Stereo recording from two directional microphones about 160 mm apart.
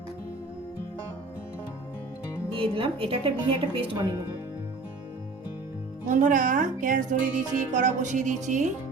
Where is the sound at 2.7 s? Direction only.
35° right (ahead or behind).